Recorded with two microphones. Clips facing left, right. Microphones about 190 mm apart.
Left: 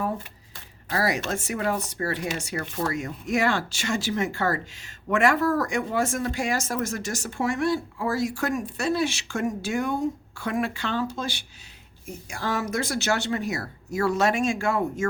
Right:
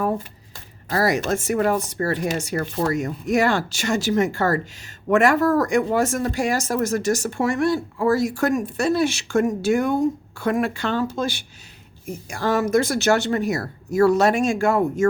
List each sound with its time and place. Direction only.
0.9 s speech: 45° right (ahead or behind)
12.3 s speech: 50° right (ahead or behind)